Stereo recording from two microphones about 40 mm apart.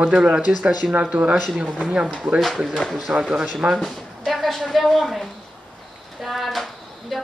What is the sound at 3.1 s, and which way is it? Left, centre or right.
Speech, right.